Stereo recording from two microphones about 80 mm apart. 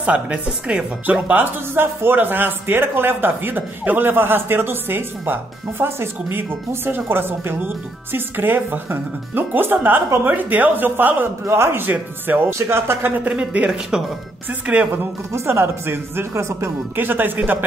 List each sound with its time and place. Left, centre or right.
0.0 s speech: centre
15.3 s speech: right